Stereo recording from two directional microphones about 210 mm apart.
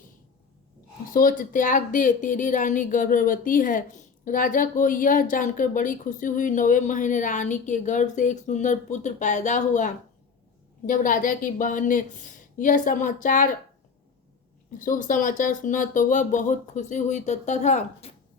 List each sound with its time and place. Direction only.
1.1 s speech: 40° left (ahead or behind)
14.8 s speech: 40° left (ahead or behind)